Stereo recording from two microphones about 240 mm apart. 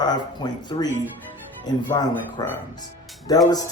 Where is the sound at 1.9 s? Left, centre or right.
Centre.